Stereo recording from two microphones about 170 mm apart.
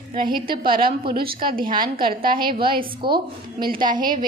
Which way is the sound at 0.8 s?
65° right (ahead or behind).